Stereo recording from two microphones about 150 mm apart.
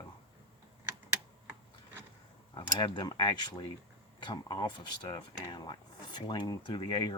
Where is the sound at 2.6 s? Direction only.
30° left (ahead or behind).